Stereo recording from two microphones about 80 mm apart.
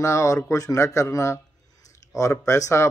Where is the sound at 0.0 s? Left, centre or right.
Left.